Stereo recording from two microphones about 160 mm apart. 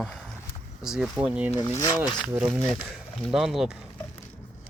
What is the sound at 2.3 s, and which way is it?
Speech, 10° right (ahead or behind).